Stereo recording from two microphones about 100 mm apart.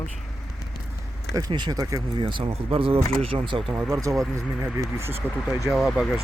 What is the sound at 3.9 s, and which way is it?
Speech, 35° right (ahead or behind).